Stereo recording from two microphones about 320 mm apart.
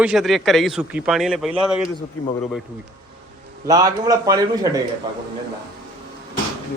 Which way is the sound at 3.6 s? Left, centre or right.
Centre.